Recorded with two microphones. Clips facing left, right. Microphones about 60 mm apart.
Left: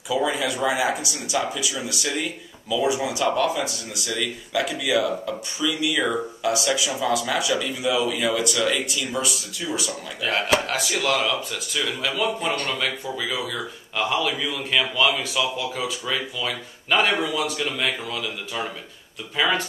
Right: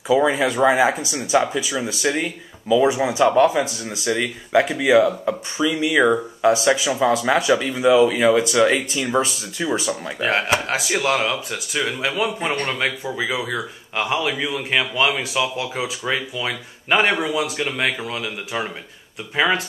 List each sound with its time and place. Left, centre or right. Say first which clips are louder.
0.1 s speech: right 6 dB; right